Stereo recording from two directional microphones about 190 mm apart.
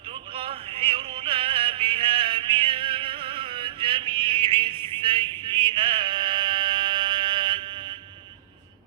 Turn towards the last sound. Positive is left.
turn(degrees=-25)  # may be behind; listen again after turning